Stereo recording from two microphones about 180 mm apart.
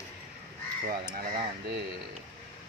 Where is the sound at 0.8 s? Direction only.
55° right (ahead or behind).